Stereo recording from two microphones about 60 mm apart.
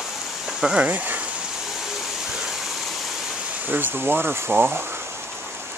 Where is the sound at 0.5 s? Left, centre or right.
Centre.